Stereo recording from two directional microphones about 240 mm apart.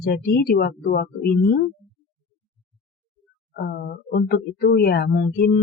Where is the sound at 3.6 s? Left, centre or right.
Left.